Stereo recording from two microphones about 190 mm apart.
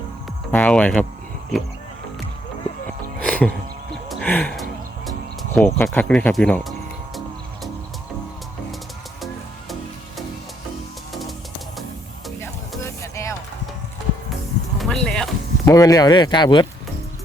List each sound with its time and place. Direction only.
0.5 s speech: 5° left (ahead or behind)
3.2 s music: 5° left (ahead or behind)
4.1 s a sound: 5° left (ahead or behind)
5.0 s music: centre (ahead or behind)
5.6 s speech: 10° left (ahead or behind)
12.8 s music: 15° left (ahead or behind)
14.8 s a sound: 5° left (ahead or behind)
15.7 s speech: 20° left (ahead or behind)